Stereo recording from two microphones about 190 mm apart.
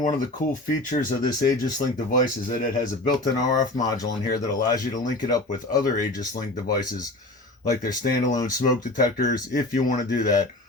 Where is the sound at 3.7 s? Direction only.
20° left (ahead or behind).